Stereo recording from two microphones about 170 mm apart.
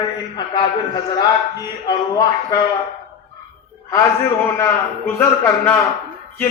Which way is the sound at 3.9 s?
15° left (ahead or behind).